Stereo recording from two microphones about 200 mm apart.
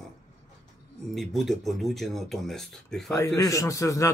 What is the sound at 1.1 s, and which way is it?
Speech, centre (ahead or behind).